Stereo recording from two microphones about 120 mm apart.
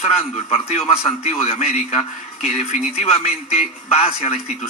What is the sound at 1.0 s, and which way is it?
Speech, 60° left (ahead or behind).